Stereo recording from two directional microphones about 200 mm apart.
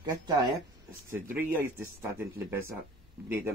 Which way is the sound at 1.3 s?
10° right (ahead or behind).